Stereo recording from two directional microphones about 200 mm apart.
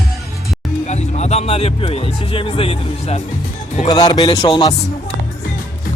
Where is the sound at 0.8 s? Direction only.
35° left (ahead or behind).